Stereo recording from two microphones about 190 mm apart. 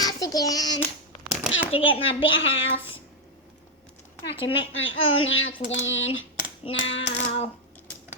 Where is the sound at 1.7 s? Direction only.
30° left (ahead or behind).